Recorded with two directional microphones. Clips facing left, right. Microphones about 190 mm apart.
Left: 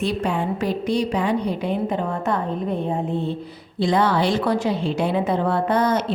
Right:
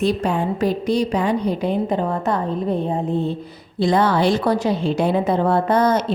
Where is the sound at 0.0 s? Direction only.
40° right (ahead or behind).